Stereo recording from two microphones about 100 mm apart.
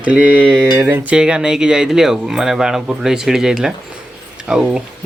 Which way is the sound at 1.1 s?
10° right (ahead or behind).